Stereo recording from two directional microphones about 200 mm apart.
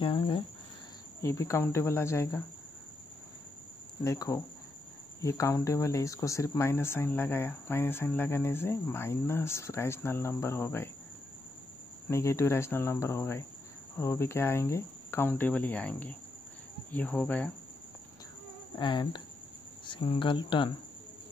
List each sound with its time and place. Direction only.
0.0 s speech: 25° left (ahead or behind)
4.0 s speech: 15° left (ahead or behind)
12.1 s speech: 15° left (ahead or behind)
18.8 s speech: 20° left (ahead or behind)